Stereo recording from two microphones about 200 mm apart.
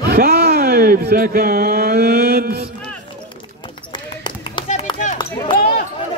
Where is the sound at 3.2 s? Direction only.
25° left (ahead or behind).